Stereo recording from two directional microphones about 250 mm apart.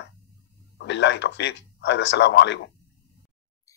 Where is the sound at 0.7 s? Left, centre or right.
Left.